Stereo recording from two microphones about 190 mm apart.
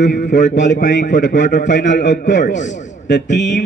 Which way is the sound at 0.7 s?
45° left (ahead or behind).